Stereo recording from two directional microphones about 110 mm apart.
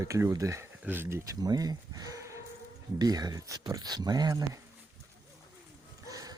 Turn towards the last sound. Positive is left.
turn(degrees=-35)  # may be behind; listen again after turning